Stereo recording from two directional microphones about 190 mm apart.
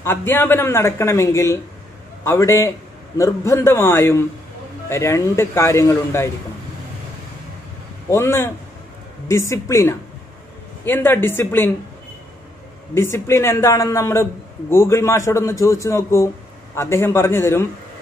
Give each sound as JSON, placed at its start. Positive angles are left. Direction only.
{"t": 0.0, "sound": "a man's voice", "side_deg": 10}
{"t": 8.1, "sound": "a man's voice", "side_deg": 15}
{"t": 12.9, "sound": "a man's voice", "side_deg": 15}